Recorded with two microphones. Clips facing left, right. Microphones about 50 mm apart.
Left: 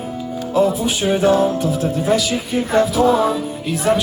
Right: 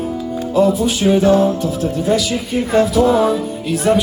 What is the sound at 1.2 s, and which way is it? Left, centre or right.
Music, left.